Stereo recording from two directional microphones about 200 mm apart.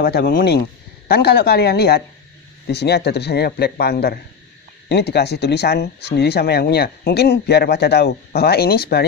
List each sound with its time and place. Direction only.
0.0 s speech: 50° left (ahead or behind)